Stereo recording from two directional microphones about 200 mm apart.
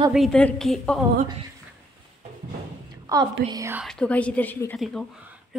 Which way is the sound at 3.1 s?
20° right (ahead or behind).